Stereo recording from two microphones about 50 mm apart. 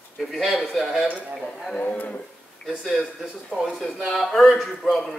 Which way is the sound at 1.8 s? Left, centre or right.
Left.